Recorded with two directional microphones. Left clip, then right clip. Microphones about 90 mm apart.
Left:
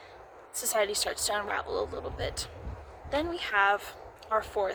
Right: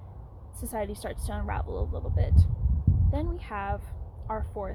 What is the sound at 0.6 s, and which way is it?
A woman's voice, 20° left (ahead or behind).